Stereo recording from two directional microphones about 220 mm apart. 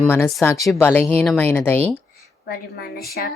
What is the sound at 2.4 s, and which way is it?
Speech, 45° left (ahead or behind).